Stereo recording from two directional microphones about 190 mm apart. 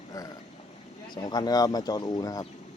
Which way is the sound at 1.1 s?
20° left (ahead or behind).